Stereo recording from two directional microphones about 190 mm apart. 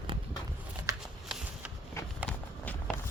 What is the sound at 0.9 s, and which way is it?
Shuffling cards, 20° right (ahead or behind).